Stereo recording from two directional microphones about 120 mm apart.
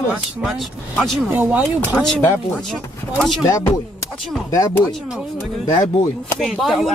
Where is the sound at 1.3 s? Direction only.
15° right (ahead or behind).